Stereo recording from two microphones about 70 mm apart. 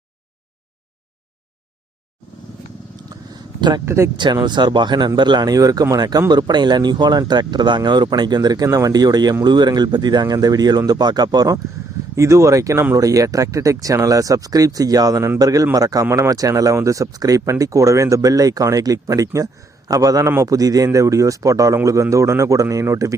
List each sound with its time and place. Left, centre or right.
3.1 s a sound: right
3.8 s speech: right
4.4 s speech: right
8.6 s speech: right
9.4 s speech: right
12.1 s speech: right
16.0 s speech: right
16.3 s speech: right